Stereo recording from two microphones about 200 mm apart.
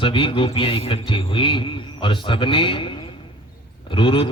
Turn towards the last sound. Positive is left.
turn(degrees=25)  # may be behind; listen again after turning